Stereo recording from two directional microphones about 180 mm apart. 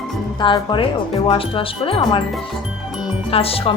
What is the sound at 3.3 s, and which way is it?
Speech, 30° left (ahead or behind).